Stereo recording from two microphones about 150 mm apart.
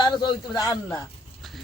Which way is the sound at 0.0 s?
30° left (ahead or behind).